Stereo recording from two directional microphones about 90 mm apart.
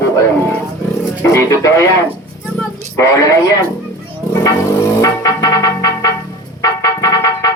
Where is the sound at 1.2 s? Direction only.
30° left (ahead or behind).